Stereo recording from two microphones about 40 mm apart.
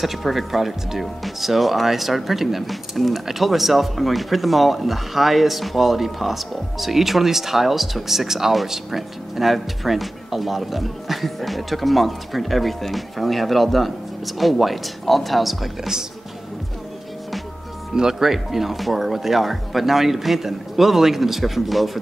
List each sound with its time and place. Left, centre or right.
0.0 s speech: centre
17.9 s speech: centre